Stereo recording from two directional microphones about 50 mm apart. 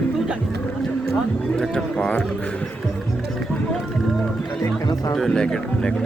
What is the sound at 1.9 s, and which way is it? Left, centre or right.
Speech, left.